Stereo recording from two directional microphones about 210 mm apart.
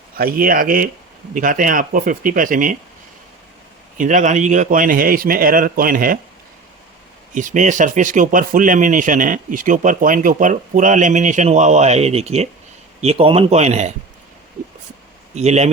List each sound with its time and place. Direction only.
0.2 s speech: 40° right (ahead or behind)
3.9 s speech: 35° right (ahead or behind)
7.3 s speech: 35° right (ahead or behind)
15.4 s speech: 30° right (ahead or behind)